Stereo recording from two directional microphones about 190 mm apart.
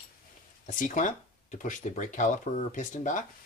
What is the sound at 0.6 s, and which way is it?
Speech, 40° left (ahead or behind).